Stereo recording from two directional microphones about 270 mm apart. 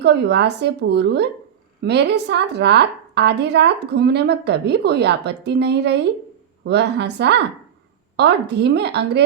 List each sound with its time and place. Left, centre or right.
0.0 s a woman's voice: right